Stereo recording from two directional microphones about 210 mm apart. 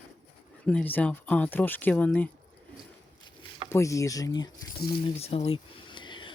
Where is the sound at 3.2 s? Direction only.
20° left (ahead or behind).